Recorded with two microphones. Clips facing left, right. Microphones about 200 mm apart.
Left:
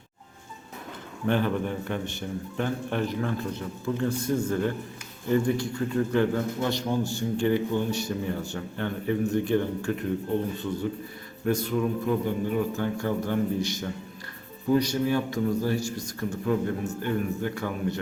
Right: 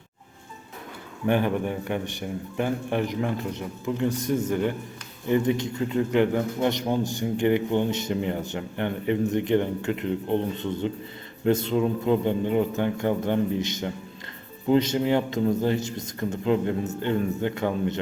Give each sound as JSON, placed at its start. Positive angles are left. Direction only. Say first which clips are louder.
{"t": 1.3, "sound": "a man's voice", "louder": "right 2 dB", "side_deg": -15}